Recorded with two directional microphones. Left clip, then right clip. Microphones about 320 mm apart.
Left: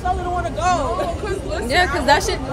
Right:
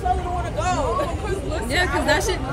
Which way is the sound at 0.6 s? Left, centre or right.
Centre.